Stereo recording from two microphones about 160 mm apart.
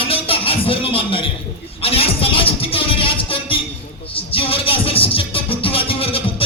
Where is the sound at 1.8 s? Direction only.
35° left (ahead or behind).